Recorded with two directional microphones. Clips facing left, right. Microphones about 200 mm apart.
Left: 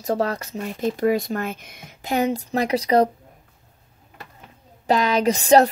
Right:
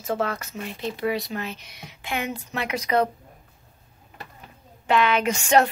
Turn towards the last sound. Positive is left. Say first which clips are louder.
# left 5 dB
turn(degrees=35)  # may be behind; listen again after turning